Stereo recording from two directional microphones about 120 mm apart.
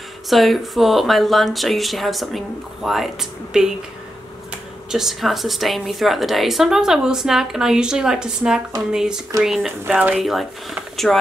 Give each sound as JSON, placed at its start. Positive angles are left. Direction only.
{"t": 0.3, "sound": "a woman's voice", "side_deg": 0}
{"t": 4.9, "sound": "a woman's voice", "side_deg": -5}
{"t": 10.1, "sound": "a woman's voice", "side_deg": 0}